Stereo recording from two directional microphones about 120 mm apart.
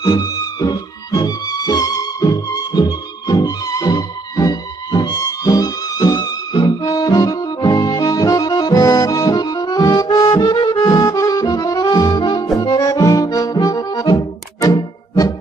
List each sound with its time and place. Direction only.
0.0 s music: 30° left (ahead or behind)
12.5 s accordion: 30° left (ahead or behind)